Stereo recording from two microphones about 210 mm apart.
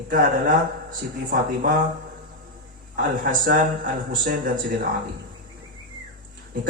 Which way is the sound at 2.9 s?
45° right (ahead or behind).